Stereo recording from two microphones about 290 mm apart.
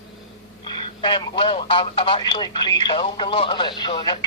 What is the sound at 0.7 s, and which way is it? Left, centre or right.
Speech, centre.